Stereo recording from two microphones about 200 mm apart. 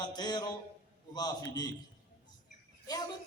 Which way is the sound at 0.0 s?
20° left (ahead or behind).